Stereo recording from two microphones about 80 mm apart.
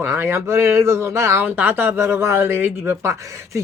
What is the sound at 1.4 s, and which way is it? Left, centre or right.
Speech, right.